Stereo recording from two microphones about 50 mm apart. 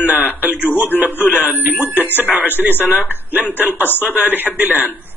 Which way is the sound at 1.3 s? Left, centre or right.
Right.